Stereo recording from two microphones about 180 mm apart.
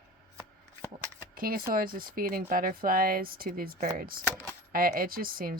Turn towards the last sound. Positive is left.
turn(degrees=-55)  # may be behind; listen again after turning